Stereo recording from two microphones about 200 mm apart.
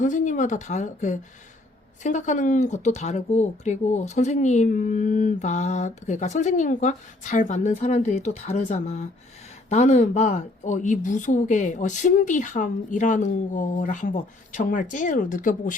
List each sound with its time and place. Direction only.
0.0 s speech: 40° left (ahead or behind)